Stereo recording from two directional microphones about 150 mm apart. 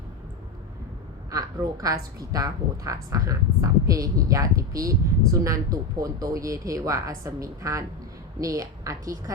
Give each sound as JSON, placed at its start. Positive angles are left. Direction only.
{"t": 1.3, "sound": "a woman's voice", "side_deg": -25}